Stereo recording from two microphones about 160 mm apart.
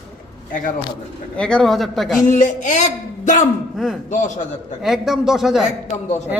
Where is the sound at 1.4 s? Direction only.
5° left (ahead or behind).